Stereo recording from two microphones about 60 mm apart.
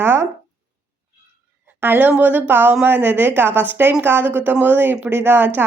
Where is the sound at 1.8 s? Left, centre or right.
Right.